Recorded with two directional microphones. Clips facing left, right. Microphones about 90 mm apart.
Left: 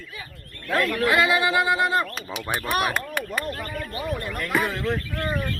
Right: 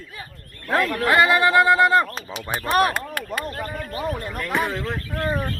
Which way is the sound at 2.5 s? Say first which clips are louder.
Right 5 dB; 35° right (ahead or behind).